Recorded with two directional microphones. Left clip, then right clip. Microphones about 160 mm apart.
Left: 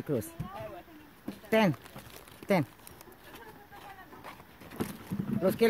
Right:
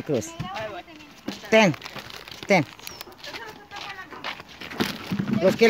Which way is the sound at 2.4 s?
10° left (ahead or behind).